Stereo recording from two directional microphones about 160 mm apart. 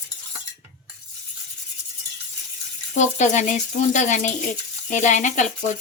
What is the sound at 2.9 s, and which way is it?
Speech, 50° left (ahead or behind).